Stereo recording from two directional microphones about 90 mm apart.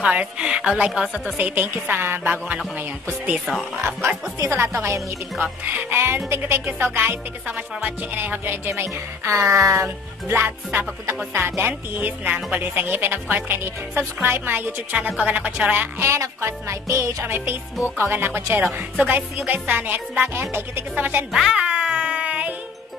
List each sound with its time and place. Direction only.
0.0 s a woman's voice: 15° right (ahead or behind)
1.3 s speech: 20° right (ahead or behind)
4.4 s music: 30° right (ahead or behind)
5.4 s speech: 20° right (ahead or behind)
9.2 s music: 35° right (ahead or behind)
11.3 s speech: 25° right (ahead or behind)
15.7 s music: 25° right (ahead or behind)
17.2 s speech: 20° right (ahead or behind)
21.3 s meow: 5° right (ahead or behind)